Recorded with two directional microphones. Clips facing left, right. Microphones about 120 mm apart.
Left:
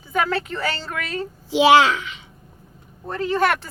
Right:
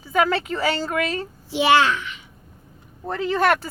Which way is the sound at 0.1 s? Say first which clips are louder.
Right 2 dB; 5° right (ahead or behind).